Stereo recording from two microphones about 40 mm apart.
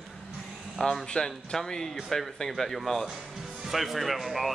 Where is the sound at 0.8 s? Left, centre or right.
Centre.